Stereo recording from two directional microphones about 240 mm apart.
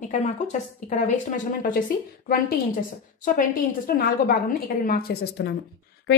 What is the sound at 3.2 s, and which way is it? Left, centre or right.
A woman's voice, left.